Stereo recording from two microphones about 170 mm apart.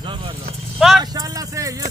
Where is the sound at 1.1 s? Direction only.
20° right (ahead or behind).